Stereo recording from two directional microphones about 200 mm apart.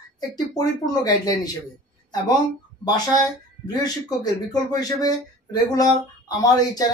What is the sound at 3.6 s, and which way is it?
Speech, 20° left (ahead or behind).